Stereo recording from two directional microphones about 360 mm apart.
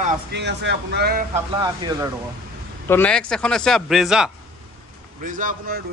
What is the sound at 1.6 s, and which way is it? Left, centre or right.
Speech, centre.